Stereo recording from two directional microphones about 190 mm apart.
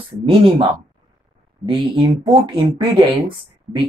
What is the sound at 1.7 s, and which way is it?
Speech, 25° right (ahead or behind).